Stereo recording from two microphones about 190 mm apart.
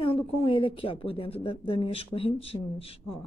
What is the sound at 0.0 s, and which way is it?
A woman's voice, 30° left (ahead or behind).